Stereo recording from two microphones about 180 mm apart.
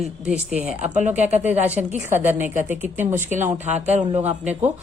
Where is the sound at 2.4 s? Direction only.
10° right (ahead or behind).